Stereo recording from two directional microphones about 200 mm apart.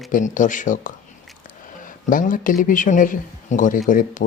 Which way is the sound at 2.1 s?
40° left (ahead or behind).